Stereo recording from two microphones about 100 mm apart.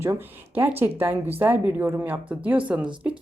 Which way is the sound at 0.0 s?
25° right (ahead or behind).